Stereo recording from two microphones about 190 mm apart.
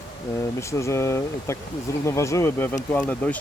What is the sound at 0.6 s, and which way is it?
Speech, 15° left (ahead or behind).